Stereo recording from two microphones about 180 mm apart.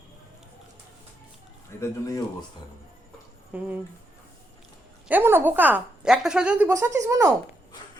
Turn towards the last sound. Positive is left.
turn(degrees=-20)  # may be behind; listen again after turning